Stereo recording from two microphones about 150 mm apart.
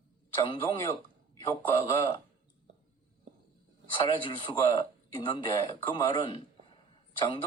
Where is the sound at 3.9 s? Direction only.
35° left (ahead or behind).